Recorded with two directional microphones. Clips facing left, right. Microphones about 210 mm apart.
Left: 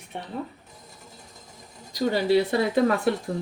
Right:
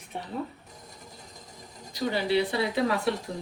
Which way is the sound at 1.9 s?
40° left (ahead or behind).